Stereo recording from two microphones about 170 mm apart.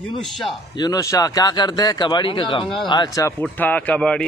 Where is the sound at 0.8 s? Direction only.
20° left (ahead or behind).